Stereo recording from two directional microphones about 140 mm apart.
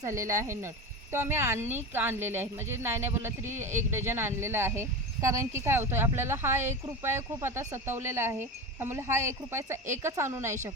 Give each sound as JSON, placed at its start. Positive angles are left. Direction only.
{"t": 0.0, "sound": "a woman's voice", "side_deg": -20}